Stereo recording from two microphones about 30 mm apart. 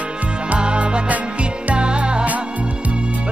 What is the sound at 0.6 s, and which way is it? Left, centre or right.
Music, right.